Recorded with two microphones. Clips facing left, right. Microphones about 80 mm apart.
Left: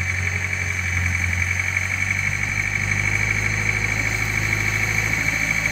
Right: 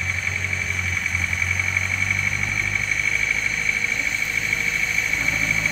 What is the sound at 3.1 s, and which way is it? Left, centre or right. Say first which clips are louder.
Vehicle: left 1 dB; left.